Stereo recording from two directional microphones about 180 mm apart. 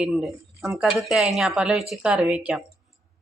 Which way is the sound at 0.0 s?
Centre (ahead or behind).